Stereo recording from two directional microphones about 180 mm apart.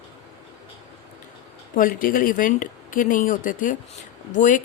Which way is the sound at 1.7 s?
50° left (ahead or behind).